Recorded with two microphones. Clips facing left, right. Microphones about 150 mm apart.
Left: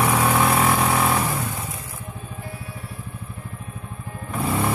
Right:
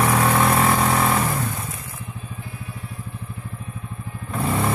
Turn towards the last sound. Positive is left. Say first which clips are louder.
# even
turn(degrees=0)  # may be behind; listen again after turning